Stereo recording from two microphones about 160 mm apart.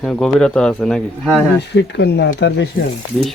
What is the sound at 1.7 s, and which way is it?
Speech, 90° left.